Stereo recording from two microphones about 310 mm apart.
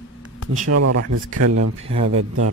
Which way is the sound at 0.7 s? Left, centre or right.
Right.